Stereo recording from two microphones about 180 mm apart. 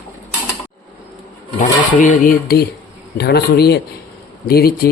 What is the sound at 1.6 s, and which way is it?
Speech, 45° left (ahead or behind).